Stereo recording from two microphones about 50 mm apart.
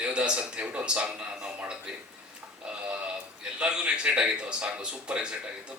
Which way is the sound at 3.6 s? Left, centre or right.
Right.